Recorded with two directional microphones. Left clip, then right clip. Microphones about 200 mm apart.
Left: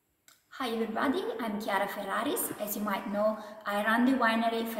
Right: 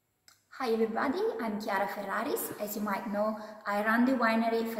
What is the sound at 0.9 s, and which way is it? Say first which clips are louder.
A woman's voice: even; centre (ahead or behind).